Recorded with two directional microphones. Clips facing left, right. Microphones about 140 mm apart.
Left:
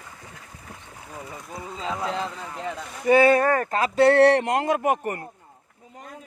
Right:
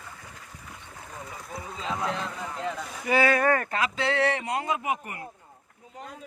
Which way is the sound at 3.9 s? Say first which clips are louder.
Left 13 dB; 60° left (ahead or behind).